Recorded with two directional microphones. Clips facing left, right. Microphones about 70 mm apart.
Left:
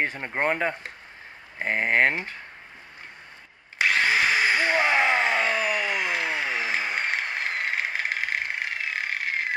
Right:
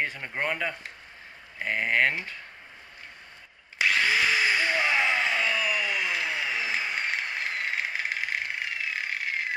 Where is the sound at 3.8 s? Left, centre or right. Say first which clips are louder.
Left 2 dB; left.